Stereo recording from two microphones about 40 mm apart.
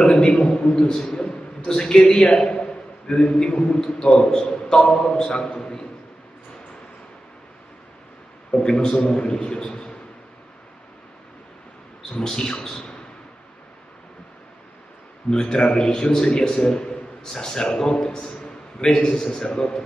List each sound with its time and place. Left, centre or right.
0.0 s a man's voice: left
8.6 s a man's voice: left
12.1 s a man's voice: left
15.2 s a man's voice: centre